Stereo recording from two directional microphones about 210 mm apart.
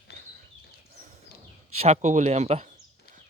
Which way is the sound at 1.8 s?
35° right (ahead or behind).